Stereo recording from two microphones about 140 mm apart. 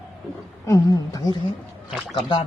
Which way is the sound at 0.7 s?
25° left (ahead or behind).